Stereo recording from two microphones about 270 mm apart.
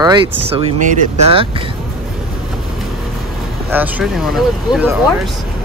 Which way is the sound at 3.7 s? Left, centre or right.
Centre.